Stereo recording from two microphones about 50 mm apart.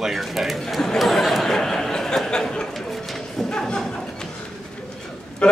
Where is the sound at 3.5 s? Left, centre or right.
Centre.